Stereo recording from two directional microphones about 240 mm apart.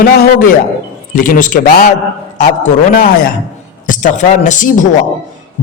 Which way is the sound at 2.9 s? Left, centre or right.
Left.